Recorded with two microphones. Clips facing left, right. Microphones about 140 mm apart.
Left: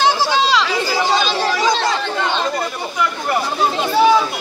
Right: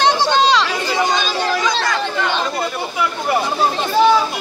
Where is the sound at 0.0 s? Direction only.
5° left (ahead or behind).